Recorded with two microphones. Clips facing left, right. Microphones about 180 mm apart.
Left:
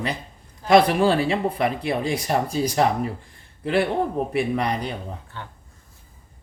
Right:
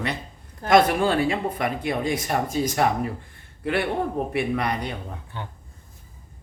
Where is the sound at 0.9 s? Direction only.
30° left (ahead or behind).